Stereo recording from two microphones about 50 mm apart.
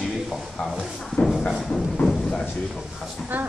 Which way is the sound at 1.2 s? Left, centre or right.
Left.